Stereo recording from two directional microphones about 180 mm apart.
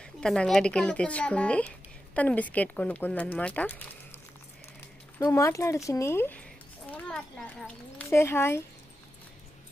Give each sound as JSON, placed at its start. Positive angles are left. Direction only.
{"t": 0.0, "sound": "speech", "side_deg": 5}
{"t": 5.2, "sound": "a child's voice", "side_deg": 15}